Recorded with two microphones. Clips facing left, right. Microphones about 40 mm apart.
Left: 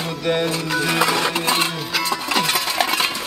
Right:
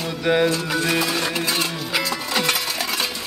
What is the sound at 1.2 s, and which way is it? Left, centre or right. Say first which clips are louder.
Music: left 3 dB; left.